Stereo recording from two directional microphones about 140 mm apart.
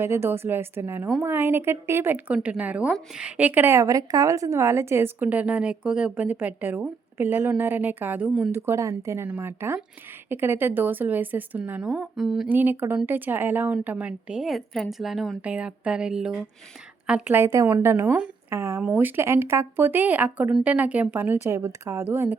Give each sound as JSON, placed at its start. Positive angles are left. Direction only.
{"t": 0.0, "sound": "a woman's voice", "side_deg": -15}
{"t": 12.5, "sound": "a woman's voice", "side_deg": -15}